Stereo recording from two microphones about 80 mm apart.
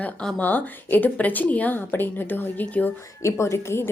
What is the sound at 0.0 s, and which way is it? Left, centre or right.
A woman's voice, centre.